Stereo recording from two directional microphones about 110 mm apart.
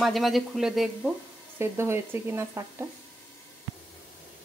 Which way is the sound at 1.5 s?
20° right (ahead or behind).